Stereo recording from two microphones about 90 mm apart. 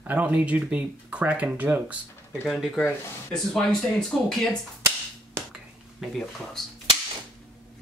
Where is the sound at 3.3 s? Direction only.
10° left (ahead or behind).